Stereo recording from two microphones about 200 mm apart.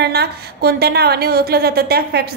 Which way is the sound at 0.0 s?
55° right (ahead or behind).